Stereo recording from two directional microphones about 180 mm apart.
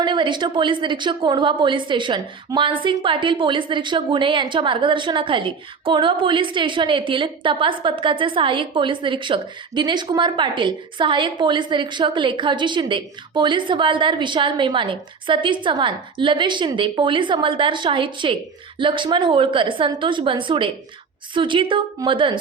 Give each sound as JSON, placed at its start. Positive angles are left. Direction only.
{"t": 0.0, "sound": "a woman's voice", "side_deg": -25}